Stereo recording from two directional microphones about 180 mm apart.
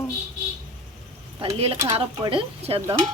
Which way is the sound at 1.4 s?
35° right (ahead or behind).